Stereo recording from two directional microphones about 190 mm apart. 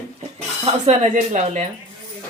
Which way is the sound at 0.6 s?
35° right (ahead or behind).